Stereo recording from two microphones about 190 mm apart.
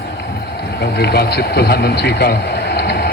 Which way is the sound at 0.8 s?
55° left (ahead or behind).